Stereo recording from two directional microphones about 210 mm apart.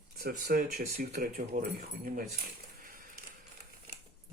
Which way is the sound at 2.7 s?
45° right (ahead or behind).